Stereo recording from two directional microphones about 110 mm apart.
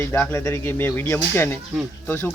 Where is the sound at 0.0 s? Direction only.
20° left (ahead or behind).